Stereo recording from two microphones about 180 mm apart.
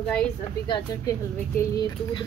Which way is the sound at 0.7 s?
25° left (ahead or behind).